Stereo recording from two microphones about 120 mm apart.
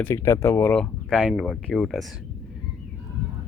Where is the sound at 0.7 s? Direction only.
5° left (ahead or behind).